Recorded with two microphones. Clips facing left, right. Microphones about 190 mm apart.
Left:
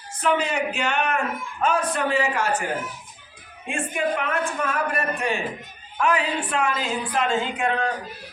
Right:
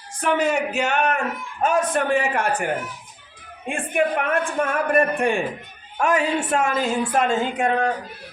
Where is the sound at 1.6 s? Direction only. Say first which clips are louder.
Right 3 dB; 45° right (ahead or behind).